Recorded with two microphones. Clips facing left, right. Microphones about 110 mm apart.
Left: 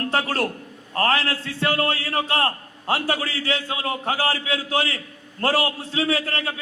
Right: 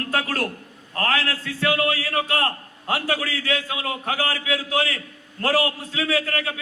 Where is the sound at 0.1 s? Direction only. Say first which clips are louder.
Even; 30° left (ahead or behind).